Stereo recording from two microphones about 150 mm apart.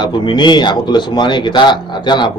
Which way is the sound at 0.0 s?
30° left (ahead or behind).